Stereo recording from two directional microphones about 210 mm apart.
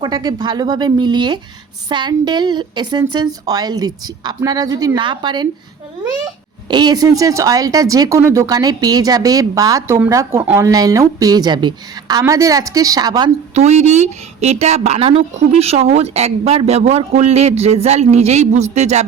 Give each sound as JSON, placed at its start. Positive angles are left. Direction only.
{"t": 0.0, "sound": "a woman's voice", "side_deg": -20}
{"t": 6.7, "sound": "speech", "side_deg": -20}
{"t": 13.5, "sound": "a woman's voice", "side_deg": -30}